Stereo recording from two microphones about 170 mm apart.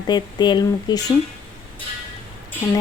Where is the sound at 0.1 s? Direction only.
25° left (ahead or behind).